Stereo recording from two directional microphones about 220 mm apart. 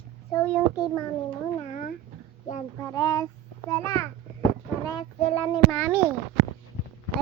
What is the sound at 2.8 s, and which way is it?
Child singing, 15° left (ahead or behind).